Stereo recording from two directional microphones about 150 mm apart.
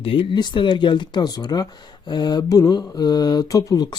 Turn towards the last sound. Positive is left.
turn(degrees=25)  # may be behind; listen again after turning